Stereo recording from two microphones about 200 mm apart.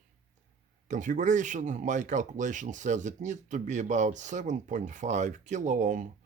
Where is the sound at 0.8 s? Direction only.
40° right (ahead or behind).